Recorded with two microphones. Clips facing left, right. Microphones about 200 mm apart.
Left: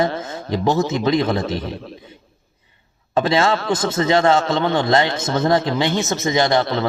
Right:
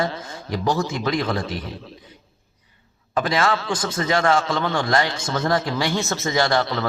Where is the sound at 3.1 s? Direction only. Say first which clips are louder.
Left 4 dB; 25° left (ahead or behind).